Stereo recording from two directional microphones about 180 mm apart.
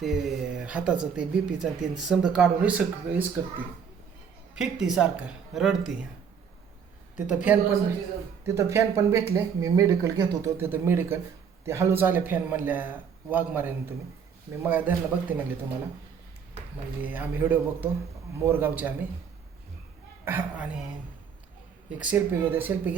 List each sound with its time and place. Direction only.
0.0 s speech: centre (ahead or behind)
4.5 s speech: 5° right (ahead or behind)
7.3 s speech: 5° right (ahead or behind)
17.0 s speech: 10° right (ahead or behind)
20.2 s speech: 10° right (ahead or behind)
21.8 s speech: 5° right (ahead or behind)